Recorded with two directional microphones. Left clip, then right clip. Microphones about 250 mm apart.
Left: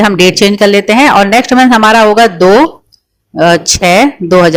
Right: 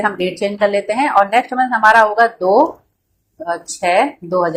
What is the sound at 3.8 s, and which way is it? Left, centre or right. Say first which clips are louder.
Speech: left 5 dB; left.